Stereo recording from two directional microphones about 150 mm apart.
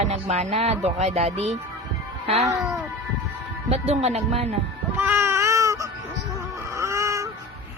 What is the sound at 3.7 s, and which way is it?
Speech, 45° right (ahead or behind).